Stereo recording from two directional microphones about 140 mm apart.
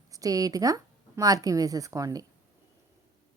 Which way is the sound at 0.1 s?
25° right (ahead or behind).